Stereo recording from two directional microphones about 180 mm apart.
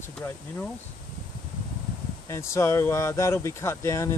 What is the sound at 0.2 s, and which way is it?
Speech, 15° left (ahead or behind).